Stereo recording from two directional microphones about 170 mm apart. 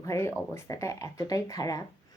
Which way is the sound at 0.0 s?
15° left (ahead or behind).